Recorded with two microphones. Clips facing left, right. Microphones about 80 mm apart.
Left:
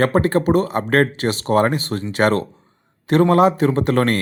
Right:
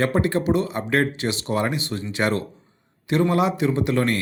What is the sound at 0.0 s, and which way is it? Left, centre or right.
Speech, left.